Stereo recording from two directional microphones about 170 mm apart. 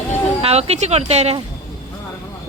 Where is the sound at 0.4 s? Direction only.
40° right (ahead or behind).